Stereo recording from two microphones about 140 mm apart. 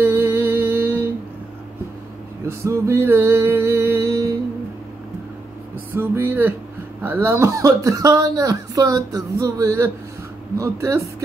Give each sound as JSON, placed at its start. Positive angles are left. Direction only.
{"t": 0.0, "sound": "music", "side_deg": -15}
{"t": 2.4, "sound": "music", "side_deg": -20}
{"t": 5.9, "sound": "music", "side_deg": -15}
{"t": 7.0, "sound": "speech", "side_deg": -15}